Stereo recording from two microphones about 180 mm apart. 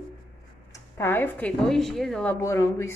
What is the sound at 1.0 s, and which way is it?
A woman's voice, 10° left (ahead or behind).